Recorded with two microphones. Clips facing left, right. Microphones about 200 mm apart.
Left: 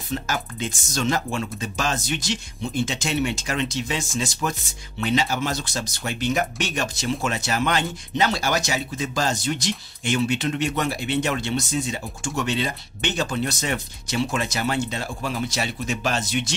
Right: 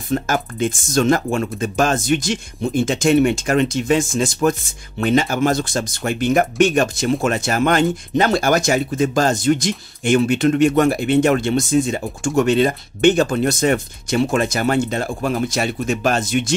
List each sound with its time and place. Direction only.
0.1 s speech: 50° right (ahead or behind)